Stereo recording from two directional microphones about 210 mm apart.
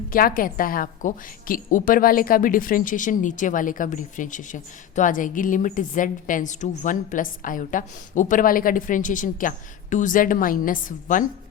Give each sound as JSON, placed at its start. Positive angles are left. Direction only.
{"t": 0.1, "sound": "a woman's voice", "side_deg": 45}